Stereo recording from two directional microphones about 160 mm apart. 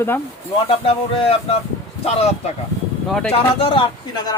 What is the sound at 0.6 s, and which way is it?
Speech, 35° left (ahead or behind).